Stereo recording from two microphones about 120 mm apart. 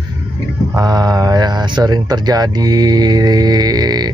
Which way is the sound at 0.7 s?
30° right (ahead or behind).